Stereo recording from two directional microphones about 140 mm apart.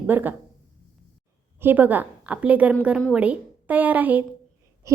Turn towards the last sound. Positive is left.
turn(degrees=-10)  # may be behind; listen again after turning